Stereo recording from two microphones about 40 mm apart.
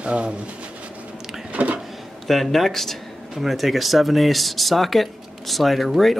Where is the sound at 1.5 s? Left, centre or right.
Right.